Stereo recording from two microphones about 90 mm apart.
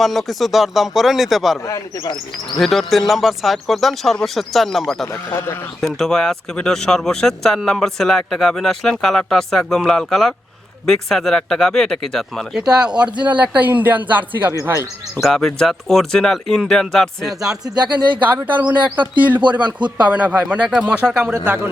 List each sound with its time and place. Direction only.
0.0 s speech: centre (ahead or behind)
2.6 s speech: centre (ahead or behind)
5.1 s speech: 25° left (ahead or behind)
5.8 s speech: 5° left (ahead or behind)
12.7 s speech: 10° right (ahead or behind)
14.6 s speech: 30° right (ahead or behind)
15.2 s speech: 5° left (ahead or behind)
17.7 s speech: 55° right (ahead or behind)
18.2 s speech: 20° right (ahead or behind)
19.6 s speech: 55° right (ahead or behind)
20.1 s speech: 15° right (ahead or behind)